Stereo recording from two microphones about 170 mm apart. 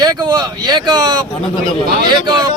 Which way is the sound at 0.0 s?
25° right (ahead or behind).